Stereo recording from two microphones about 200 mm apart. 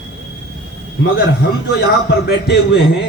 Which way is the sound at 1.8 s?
50° left (ahead or behind).